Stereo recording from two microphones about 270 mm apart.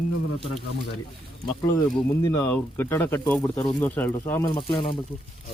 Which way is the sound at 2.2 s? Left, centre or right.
Centre.